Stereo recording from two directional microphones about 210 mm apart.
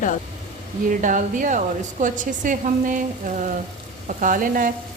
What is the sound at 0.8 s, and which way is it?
A woman's voice, 40° right (ahead or behind).